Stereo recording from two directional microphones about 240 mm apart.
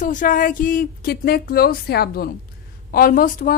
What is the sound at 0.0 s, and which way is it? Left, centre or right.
A woman's voice, left.